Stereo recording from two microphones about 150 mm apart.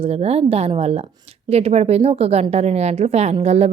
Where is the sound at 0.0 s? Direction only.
45° right (ahead or behind).